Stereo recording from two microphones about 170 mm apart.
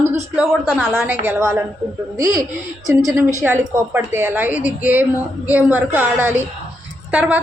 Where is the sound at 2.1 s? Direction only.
55° right (ahead or behind).